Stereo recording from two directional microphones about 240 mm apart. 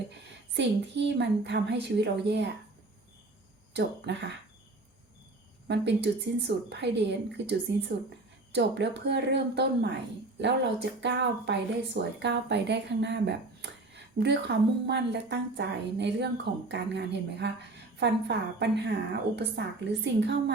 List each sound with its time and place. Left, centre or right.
0.5 s speech: right
3.8 s speech: right
5.6 s speech: right